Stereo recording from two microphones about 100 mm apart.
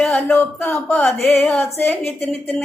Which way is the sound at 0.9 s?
20° left (ahead or behind).